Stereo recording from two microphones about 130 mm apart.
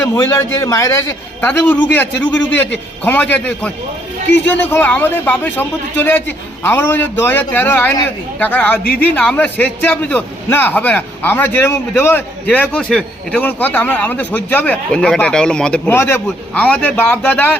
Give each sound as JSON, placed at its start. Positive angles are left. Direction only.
{"t": 0.0, "sound": "a man's voice", "side_deg": 20}
{"t": 15.9, "sound": "a man's voice", "side_deg": 20}
{"t": 16.2, "sound": "a man's voice", "side_deg": 10}